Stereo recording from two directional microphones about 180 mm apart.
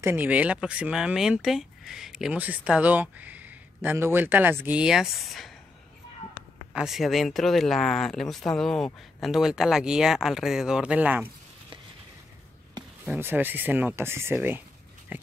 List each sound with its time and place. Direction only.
0.0 s speech: 10° right (ahead or behind)
6.7 s speech: 5° right (ahead or behind)
13.0 s speech: 10° right (ahead or behind)